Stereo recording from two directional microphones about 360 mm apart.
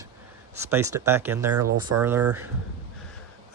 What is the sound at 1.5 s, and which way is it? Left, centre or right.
Speech, right.